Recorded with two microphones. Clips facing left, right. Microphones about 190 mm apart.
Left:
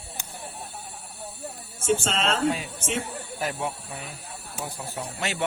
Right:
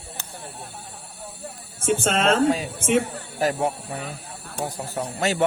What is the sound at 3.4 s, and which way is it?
Speech, 40° right (ahead or behind).